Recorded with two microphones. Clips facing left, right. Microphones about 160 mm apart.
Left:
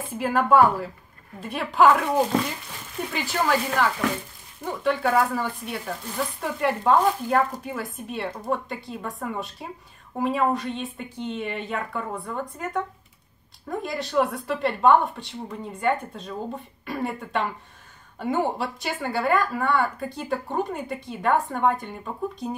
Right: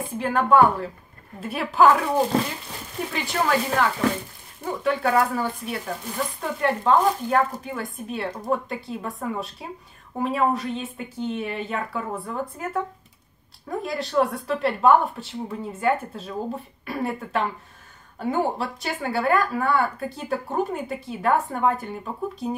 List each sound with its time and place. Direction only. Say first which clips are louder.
0.1 s a woman's voice: even; 5° left (ahead or behind)